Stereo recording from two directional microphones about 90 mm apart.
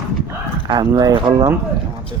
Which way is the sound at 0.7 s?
45° right (ahead or behind).